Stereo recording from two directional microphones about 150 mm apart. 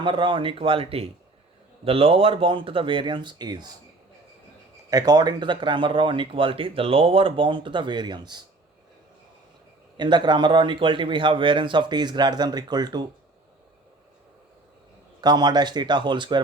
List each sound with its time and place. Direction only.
0.0 s speech: 35° right (ahead or behind)
4.9 s speech: 25° right (ahead or behind)
10.0 s speech: 30° right (ahead or behind)
15.2 s speech: 30° right (ahead or behind)